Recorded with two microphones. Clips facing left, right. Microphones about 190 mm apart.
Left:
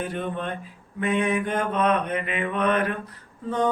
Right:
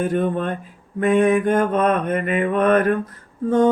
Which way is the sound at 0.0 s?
45° right (ahead or behind).